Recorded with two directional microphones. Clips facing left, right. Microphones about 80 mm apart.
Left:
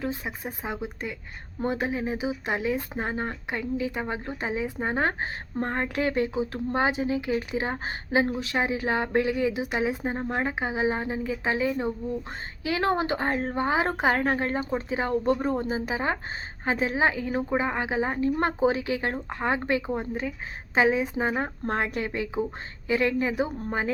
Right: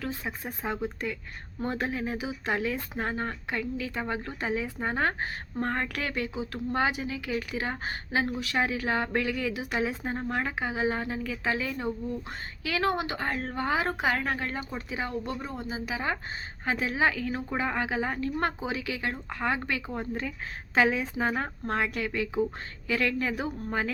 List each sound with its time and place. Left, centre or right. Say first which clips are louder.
0.0 s speech: left 3 dB; centre